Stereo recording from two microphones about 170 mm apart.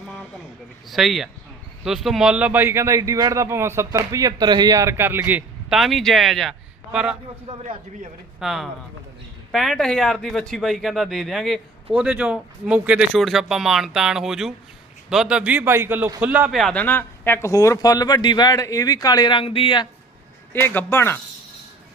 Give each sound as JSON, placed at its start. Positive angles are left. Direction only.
{"t": 0.9, "sound": "speech", "side_deg": 0}
{"t": 7.5, "sound": "a man's voice", "side_deg": -40}
{"t": 8.4, "sound": "speech", "side_deg": 0}
{"t": 20.5, "sound": "a man's voice", "side_deg": 15}